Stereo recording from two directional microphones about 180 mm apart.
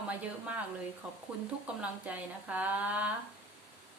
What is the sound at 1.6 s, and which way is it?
Speech, 10° right (ahead or behind).